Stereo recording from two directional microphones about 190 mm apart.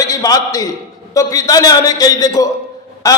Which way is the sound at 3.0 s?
15° left (ahead or behind).